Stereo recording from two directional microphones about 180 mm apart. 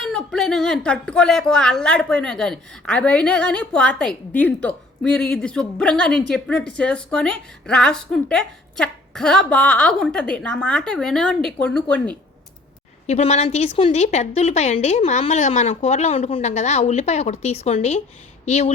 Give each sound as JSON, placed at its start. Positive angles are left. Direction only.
{"t": 0.0, "sound": "a woman's voice", "side_deg": 5}
{"t": 13.1, "sound": "a woman's voice", "side_deg": 35}